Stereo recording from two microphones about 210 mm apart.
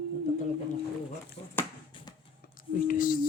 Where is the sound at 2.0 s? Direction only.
25° left (ahead or behind).